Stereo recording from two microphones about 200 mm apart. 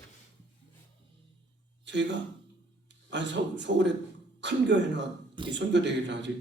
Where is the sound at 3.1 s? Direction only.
65° right (ahead or behind).